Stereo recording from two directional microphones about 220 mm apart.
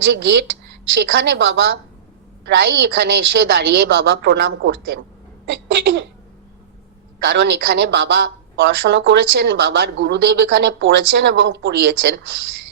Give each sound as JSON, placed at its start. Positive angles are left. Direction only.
{"t": 0.1, "sound": "a woman's voice", "side_deg": -50}
{"t": 7.3, "sound": "a woman's voice", "side_deg": -50}